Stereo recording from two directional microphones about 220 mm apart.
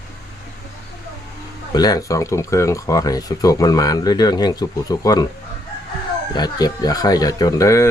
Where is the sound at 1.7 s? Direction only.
15° left (ahead or behind).